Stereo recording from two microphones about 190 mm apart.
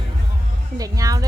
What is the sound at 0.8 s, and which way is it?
Music, 20° right (ahead or behind).